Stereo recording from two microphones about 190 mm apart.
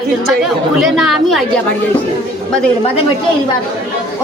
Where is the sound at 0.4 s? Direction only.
Centre (ahead or behind).